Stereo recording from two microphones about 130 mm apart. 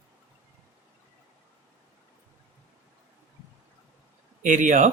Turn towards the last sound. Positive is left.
turn(degrees=-75)  # may be behind; listen again after turning